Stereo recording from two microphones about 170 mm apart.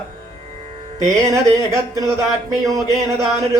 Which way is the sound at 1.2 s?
20° right (ahead or behind).